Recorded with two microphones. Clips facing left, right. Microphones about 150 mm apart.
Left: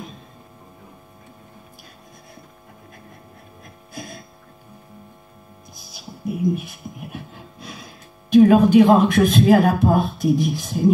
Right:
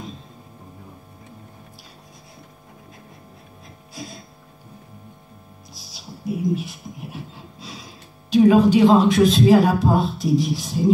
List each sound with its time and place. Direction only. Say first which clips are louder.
3.9 s music: left 1 dB; 55° left (ahead or behind)
5.8 s music: left 2 dB; 55° left (ahead or behind)
8.3 s a man's voice: left 2 dB; 55° left (ahead or behind)